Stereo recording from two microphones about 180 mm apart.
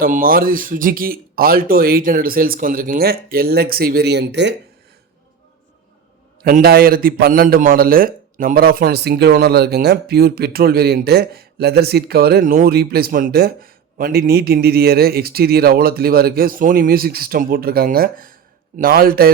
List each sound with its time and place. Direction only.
0.0 s a man's voice: 55° right (ahead or behind); by 4.5 s 75° right (ahead or behind)
6.4 s a man's voice: 55° right (ahead or behind)